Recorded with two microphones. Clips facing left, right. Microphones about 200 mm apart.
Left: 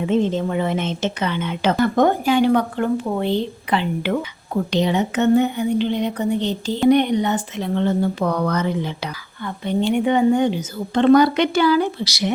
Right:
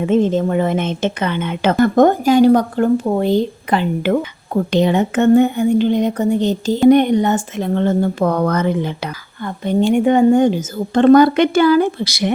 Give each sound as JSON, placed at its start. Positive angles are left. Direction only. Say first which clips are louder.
{"t": 0.0, "sound": "a woman's voice", "louder": "right 4 dB", "side_deg": -50}